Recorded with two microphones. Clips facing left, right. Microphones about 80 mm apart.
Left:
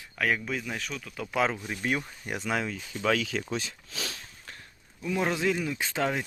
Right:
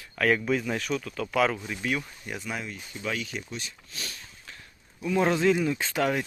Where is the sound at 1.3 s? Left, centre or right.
Left.